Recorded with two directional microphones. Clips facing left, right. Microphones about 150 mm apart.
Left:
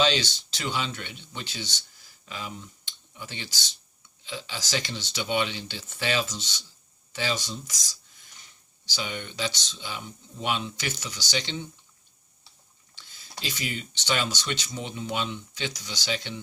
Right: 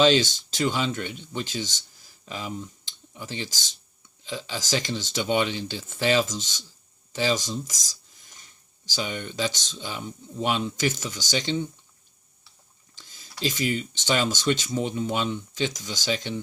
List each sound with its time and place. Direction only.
0.0 s speech: 45° right (ahead or behind)
2.2 s speech: 30° right (ahead or behind)
13.0 s a sound: 40° right (ahead or behind)
13.4 s speech: 40° right (ahead or behind)